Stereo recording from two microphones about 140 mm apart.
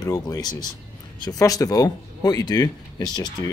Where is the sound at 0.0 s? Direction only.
25° left (ahead or behind).